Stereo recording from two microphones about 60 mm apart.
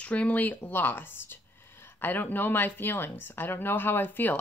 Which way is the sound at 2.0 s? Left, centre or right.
Left.